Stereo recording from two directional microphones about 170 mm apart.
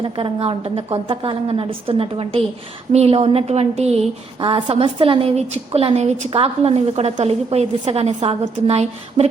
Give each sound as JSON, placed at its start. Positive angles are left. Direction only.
{"t": 0.0, "sound": "a woman's voice", "side_deg": -30}